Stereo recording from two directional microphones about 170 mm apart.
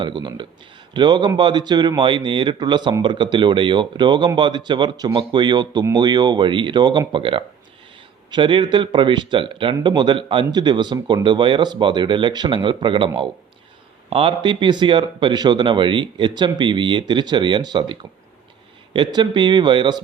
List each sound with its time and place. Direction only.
0.0 s speech: 25° right (ahead or behind)
14.1 s speech: 30° right (ahead or behind)
18.9 s speech: 25° right (ahead or behind)